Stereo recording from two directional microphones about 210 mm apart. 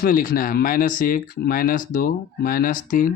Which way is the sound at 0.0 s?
40° left (ahead or behind).